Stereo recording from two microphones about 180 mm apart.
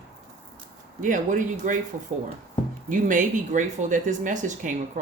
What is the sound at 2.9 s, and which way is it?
Speech, 45° right (ahead or behind).